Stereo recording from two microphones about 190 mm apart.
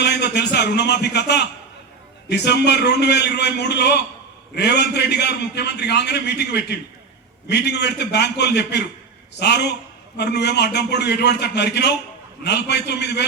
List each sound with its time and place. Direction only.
0.0 s a man's voice: 60° left (ahead or behind)